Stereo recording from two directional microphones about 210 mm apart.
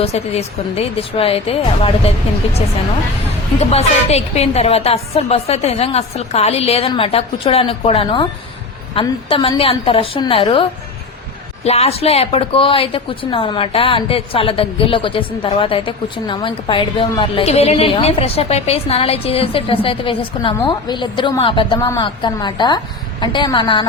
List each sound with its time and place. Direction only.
0.0 s a woman's voice: 30° left (ahead or behind)